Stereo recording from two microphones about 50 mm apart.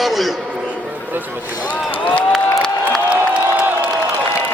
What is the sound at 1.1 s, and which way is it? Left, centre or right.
Speech, right.